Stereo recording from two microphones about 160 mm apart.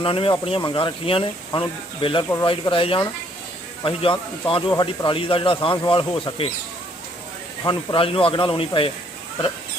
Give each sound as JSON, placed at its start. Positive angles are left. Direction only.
{"t": 0.0, "sound": "speech", "side_deg": 35}
{"t": 7.6, "sound": "speech", "side_deg": 30}